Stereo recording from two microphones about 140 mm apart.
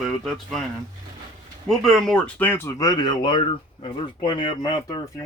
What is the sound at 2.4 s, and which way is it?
Speech, 15° left (ahead or behind).